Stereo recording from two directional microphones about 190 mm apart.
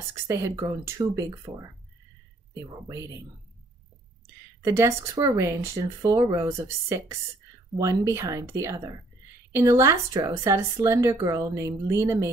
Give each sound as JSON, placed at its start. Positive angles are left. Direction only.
{"t": 0.1, "sound": "a woman's voice", "side_deg": -15}
{"t": 2.5, "sound": "a woman's voice", "side_deg": -15}
{"t": 4.6, "sound": "a woman's voice", "side_deg": -15}